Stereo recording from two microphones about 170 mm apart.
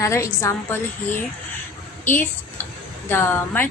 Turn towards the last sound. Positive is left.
turn(degrees=10)  # may be behind; listen again after turning